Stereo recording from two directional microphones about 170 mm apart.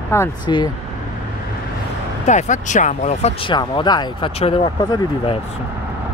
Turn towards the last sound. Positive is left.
turn(degrees=30)  # may be behind; listen again after turning